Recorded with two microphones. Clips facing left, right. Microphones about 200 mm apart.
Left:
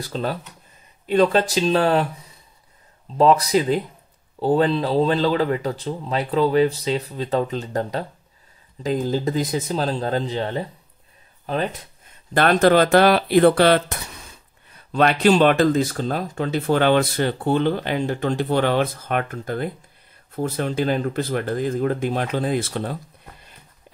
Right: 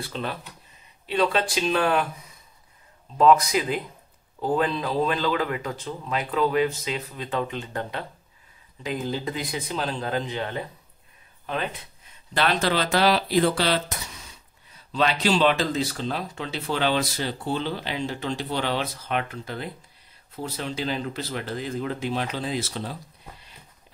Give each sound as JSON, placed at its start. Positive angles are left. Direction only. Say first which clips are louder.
{"t": 0.0, "sound": "speech", "louder": "left 5 dB", "side_deg": 40}
{"t": 3.2, "sound": "speech", "louder": "left 2 dB", "side_deg": 30}
{"t": 12.4, "sound": "speech", "louder": "left 8 dB", "side_deg": 50}